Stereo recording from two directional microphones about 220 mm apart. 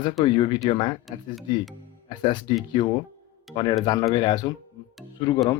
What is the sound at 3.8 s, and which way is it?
Speech, 15° left (ahead or behind).